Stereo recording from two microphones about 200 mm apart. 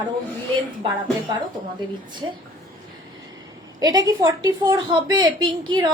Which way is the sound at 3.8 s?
20° right (ahead or behind).